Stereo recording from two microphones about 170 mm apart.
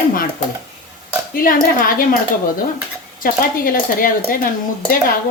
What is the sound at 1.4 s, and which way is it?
Speech, 55° left (ahead or behind).